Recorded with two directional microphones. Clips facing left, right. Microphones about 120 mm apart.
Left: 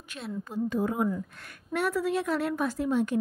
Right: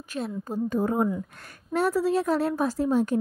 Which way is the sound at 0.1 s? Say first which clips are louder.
Right 4 dB; 40° right (ahead or behind).